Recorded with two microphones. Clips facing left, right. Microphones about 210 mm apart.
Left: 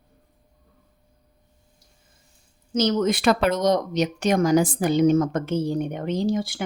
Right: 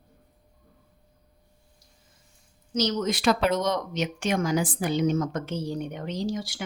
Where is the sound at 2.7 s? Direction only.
55° left (ahead or behind).